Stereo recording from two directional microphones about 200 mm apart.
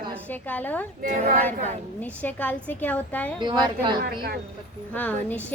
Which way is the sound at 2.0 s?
10° left (ahead or behind).